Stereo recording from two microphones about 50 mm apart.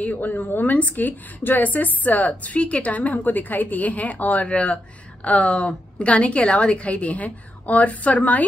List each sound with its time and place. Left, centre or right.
0.0 s a woman's voice: left